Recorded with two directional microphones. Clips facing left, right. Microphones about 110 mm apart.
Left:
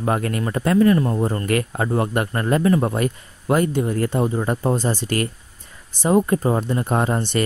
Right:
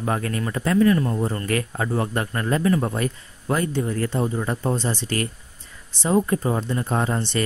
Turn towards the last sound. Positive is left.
turn(degrees=40)  # may be behind; listen again after turning